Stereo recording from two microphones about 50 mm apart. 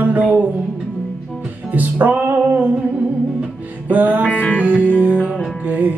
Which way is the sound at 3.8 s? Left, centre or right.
Right.